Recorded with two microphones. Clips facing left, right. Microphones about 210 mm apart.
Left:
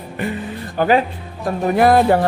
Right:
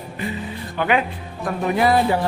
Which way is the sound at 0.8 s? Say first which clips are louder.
Left 5 dB; 35° left (ahead or behind).